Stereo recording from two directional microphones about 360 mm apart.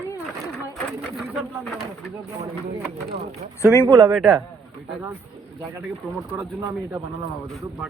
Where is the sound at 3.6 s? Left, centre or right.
Centre.